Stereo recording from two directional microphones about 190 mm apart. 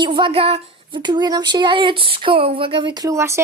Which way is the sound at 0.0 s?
25° right (ahead or behind).